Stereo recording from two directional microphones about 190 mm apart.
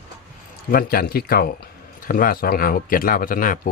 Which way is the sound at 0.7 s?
50° left (ahead or behind).